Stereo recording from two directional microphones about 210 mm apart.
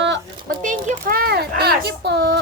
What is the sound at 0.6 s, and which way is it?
Speech, 35° right (ahead or behind).